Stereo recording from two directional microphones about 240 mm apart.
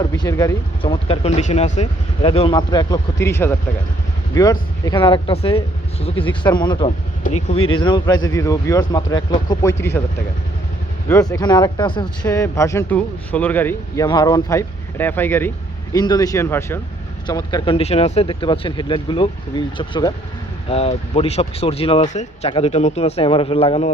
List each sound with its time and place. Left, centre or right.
0.0 s speech: centre
11.1 s speech: centre